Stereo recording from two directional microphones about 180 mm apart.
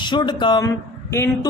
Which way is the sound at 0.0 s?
25° left (ahead or behind).